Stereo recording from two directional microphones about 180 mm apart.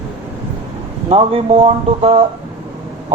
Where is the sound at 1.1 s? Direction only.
35° right (ahead or behind).